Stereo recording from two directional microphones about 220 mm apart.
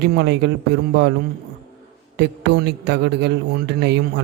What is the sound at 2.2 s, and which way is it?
A man's voice, 50° right (ahead or behind).